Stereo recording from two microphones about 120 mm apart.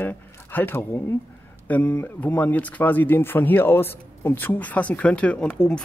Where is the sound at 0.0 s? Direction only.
15° left (ahead or behind).